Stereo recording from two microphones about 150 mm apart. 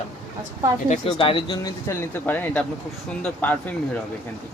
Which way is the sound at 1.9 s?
15° left (ahead or behind).